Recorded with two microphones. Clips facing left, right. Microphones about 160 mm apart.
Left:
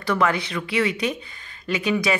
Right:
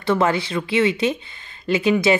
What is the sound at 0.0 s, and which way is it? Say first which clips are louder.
Speech: right 3 dB; 25° right (ahead or behind).